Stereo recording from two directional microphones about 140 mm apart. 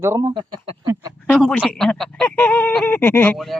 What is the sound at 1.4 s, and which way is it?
Speech, 5° left (ahead or behind).